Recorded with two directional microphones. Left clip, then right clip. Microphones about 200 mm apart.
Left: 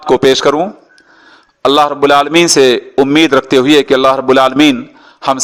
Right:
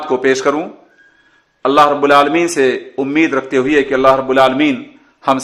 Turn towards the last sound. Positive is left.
turn(degrees=35)  # may be behind; listen again after turning